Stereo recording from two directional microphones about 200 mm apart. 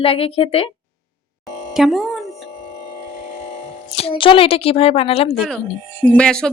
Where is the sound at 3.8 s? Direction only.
30° left (ahead or behind).